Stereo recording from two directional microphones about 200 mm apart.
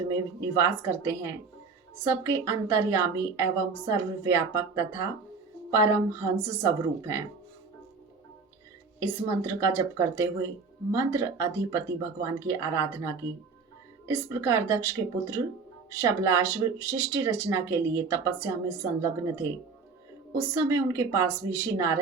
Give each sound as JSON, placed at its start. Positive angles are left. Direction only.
{"t": 0.5, "sound": "speech", "side_deg": -15}
{"t": 9.0, "sound": "speech", "side_deg": -15}
{"t": 20.5, "sound": "speech", "side_deg": -15}